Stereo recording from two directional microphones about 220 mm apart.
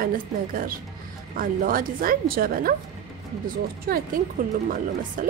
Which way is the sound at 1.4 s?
40° right (ahead or behind).